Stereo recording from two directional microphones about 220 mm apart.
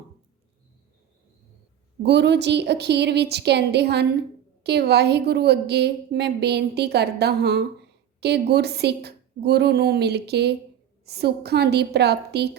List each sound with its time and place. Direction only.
2.0 s a woman's voice: 50° right (ahead or behind)